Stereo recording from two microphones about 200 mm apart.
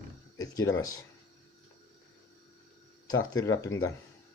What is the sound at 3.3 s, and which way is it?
Speech, 15° left (ahead or behind).